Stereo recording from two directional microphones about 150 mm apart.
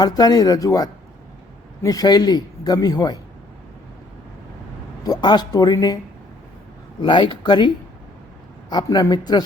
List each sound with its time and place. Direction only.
0.0 s a man's voice: 25° left (ahead or behind)
5.0 s a man's voice: 25° left (ahead or behind)
7.0 s speech: 30° left (ahead or behind)
8.7 s a man's voice: 25° left (ahead or behind)